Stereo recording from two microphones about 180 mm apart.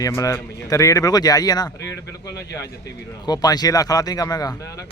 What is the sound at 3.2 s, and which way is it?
Speech, 20° left (ahead or behind).